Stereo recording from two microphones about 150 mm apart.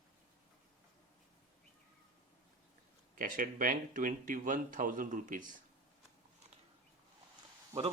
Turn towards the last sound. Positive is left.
turn(degrees=-20)  # may be behind; listen again after turning